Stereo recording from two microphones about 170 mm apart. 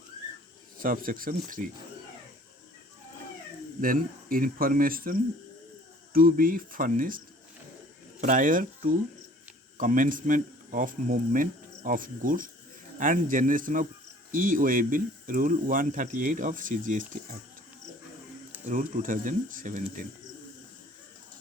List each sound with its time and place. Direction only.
0.8 s speech: 55° right (ahead or behind)
3.8 s speech: 55° right (ahead or behind)
6.1 s speech: 55° right (ahead or behind)
8.2 s speech: 50° right (ahead or behind)
18.6 s speech: 50° right (ahead or behind)